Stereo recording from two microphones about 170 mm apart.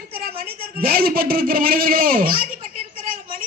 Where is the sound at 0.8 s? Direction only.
60° right (ahead or behind).